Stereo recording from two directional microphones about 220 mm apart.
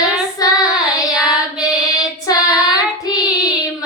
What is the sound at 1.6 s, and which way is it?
Female singing, 15° left (ahead or behind).